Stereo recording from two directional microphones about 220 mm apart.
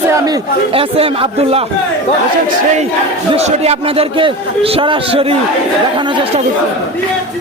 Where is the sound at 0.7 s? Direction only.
25° right (ahead or behind).